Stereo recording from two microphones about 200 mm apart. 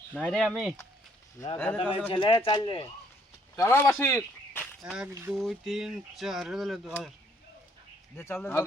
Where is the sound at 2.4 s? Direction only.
20° left (ahead or behind).